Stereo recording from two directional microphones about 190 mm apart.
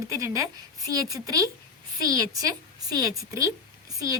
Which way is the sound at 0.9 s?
20° right (ahead or behind).